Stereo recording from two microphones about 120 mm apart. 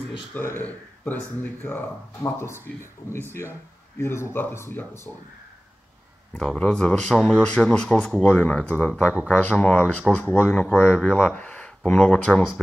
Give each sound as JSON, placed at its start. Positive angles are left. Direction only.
{"t": 0.3, "sound": "speech", "side_deg": 15}
{"t": 6.3, "sound": "speech", "side_deg": 10}